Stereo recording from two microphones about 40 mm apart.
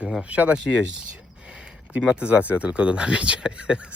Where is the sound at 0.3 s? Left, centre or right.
Right.